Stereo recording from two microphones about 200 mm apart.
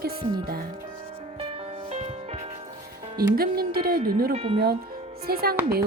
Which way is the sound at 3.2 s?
50° right (ahead or behind).